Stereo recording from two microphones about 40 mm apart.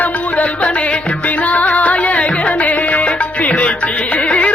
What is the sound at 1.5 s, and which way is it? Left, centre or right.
Music, left.